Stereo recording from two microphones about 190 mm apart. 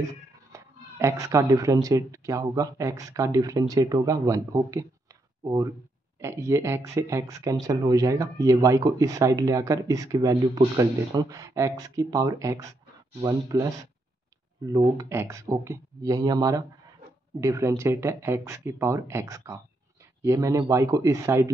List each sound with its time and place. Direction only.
0.5 s speech: 15° right (ahead or behind)
14.7 s speech: 15° right (ahead or behind)